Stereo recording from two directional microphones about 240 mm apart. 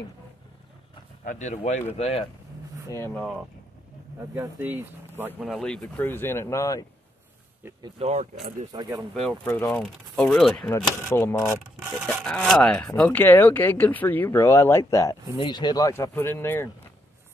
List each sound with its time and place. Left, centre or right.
1.2 s speech: left
2.9 s speech: centre
4.4 s speech: centre
7.6 s speech: centre
8.0 s speech: right
8.7 s speech: centre
9.1 s speech: centre